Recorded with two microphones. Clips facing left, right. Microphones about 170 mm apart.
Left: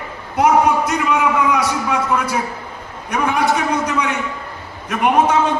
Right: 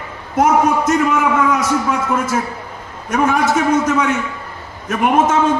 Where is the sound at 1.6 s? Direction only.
45° right (ahead or behind).